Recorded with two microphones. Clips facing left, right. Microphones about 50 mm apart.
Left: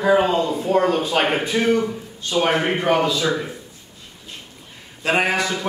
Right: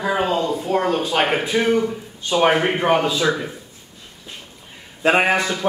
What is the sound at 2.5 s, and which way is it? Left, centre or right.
Speech, centre.